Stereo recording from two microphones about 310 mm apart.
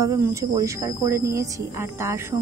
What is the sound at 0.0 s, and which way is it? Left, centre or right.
Speech, centre.